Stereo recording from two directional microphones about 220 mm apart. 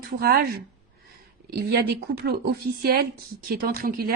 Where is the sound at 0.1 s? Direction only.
45° right (ahead or behind).